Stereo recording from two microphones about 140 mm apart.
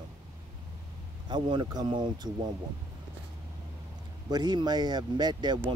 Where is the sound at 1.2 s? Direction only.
30° right (ahead or behind).